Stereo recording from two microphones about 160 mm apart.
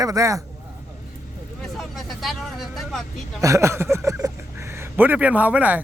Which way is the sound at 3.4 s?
20° right (ahead or behind).